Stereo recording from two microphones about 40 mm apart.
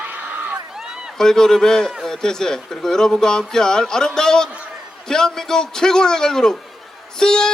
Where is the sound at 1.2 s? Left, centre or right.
Centre.